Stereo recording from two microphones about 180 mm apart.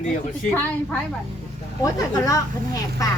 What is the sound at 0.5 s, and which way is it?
A child's voice, 10° left (ahead or behind).